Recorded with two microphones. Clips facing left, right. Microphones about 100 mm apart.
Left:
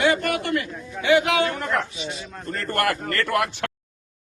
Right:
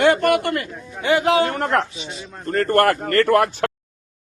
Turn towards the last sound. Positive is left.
turn(degrees=-40)  # may be behind; listen again after turning